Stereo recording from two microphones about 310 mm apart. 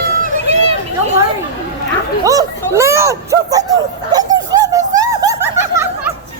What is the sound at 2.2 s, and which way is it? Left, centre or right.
Speech, centre.